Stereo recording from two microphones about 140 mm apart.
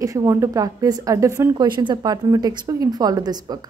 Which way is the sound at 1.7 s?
30° right (ahead or behind).